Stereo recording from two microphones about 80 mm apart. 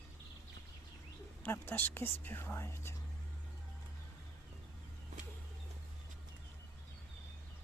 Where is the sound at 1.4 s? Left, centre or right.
Left.